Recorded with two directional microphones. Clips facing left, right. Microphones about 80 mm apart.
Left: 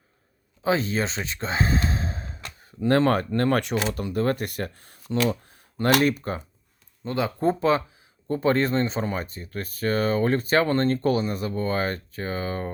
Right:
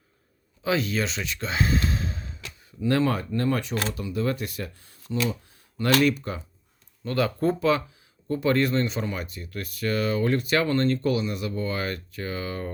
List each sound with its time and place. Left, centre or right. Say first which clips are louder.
0.6 s speech: left 2 dB; left
3.9 s speech: left 3 dB; left
5.1 s a sound: left 4 dB; left
6.0 s speech: even; left
7.0 s speech: even; left